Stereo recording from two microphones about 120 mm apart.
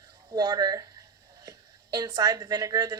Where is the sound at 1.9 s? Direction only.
30° right (ahead or behind).